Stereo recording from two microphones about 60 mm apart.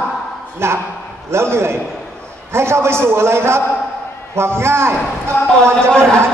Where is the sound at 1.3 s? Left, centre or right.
Right.